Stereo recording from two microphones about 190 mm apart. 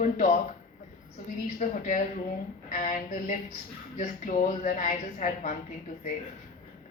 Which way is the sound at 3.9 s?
40° left (ahead or behind).